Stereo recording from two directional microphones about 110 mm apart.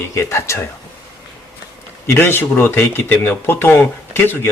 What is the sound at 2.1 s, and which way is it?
Speech, 20° left (ahead or behind).